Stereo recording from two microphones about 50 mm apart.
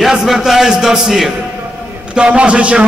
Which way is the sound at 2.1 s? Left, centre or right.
Right.